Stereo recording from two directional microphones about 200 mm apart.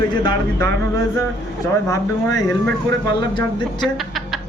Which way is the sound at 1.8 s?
15° left (ahead or behind).